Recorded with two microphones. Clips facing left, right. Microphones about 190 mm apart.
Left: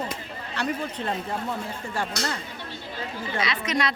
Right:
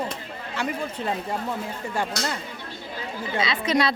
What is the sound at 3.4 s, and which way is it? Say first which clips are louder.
Speech: right 4 dB; 30° right (ahead or behind).